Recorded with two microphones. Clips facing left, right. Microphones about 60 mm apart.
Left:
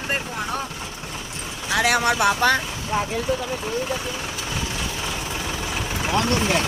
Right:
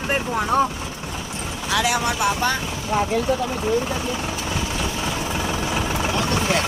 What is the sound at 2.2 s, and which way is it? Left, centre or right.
Speech, left.